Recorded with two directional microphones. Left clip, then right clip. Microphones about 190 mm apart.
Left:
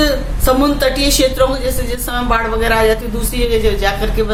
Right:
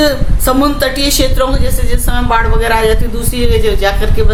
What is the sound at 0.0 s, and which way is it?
A woman's voice, 15° right (ahead or behind).